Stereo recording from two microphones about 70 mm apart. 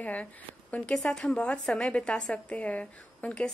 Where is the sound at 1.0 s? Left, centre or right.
Centre.